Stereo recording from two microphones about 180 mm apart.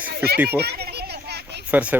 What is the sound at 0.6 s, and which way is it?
Children playing, 65° right (ahead or behind).